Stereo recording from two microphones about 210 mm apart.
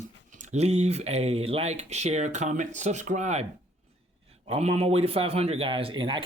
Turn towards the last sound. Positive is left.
turn(degrees=-25)  # may be behind; listen again after turning